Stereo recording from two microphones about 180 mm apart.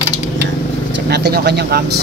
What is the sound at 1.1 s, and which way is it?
Speech, 60° right (ahead or behind).